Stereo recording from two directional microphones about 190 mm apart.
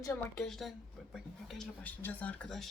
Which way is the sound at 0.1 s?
Centre (ahead or behind).